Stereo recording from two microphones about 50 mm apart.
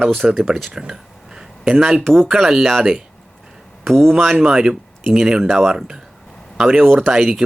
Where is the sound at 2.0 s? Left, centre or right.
Centre.